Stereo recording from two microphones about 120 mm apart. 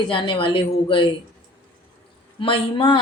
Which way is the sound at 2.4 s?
45° left (ahead or behind).